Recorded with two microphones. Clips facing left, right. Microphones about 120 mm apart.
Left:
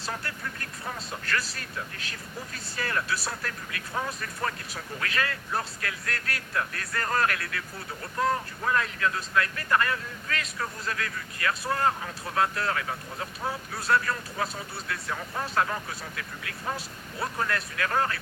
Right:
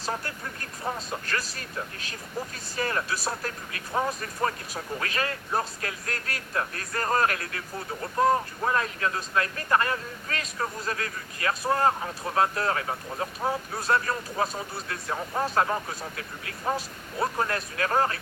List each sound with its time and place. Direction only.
0.1 s speech: 30° right (ahead or behind)
2.7 s speech: 25° right (ahead or behind)